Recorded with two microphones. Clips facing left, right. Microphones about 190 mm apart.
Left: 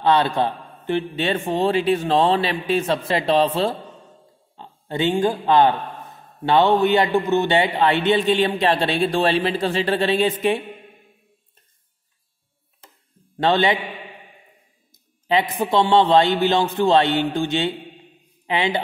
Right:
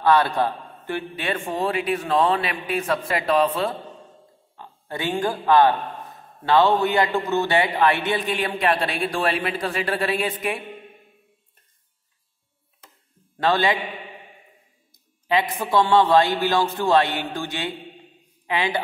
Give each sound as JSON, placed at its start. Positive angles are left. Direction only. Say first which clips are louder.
{"t": 0.0, "sound": "a man's voice", "louder": "left 1 dB", "side_deg": 20}
{"t": 13.4, "sound": "a man's voice", "louder": "left 2 dB", "side_deg": 25}
{"t": 15.2, "sound": "a man's voice", "louder": "left 2 dB", "side_deg": 25}